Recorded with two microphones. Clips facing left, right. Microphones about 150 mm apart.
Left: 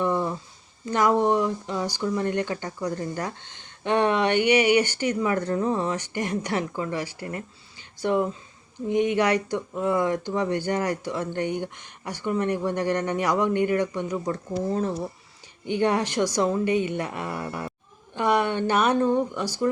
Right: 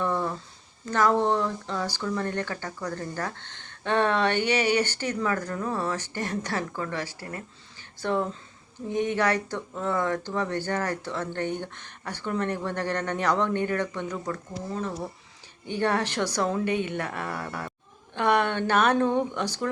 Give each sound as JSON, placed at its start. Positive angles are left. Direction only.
{"t": 0.0, "sound": "a sound", "side_deg": 15}
{"t": 0.9, "sound": "speech", "side_deg": 15}
{"t": 14.3, "sound": "speech", "side_deg": 25}
{"t": 15.7, "sound": "speech", "side_deg": 15}